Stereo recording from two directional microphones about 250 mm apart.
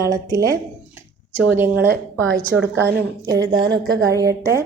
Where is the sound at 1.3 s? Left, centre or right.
Centre.